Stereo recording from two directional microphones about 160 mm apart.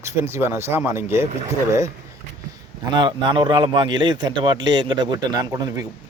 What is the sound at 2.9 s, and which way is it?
A man's voice, 30° right (ahead or behind).